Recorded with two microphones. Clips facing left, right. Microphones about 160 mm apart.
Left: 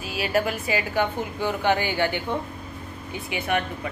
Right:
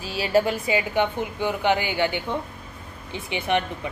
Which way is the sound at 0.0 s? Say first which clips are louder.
Right 3 dB; 30° right (ahead or behind).